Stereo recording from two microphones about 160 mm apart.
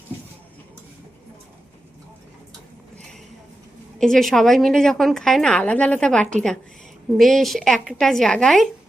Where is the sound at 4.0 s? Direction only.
5° left (ahead or behind).